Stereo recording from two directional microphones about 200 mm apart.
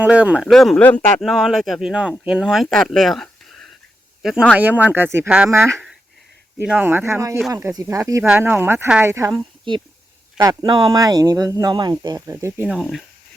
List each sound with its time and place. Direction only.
0.0 s speech: 5° right (ahead or behind)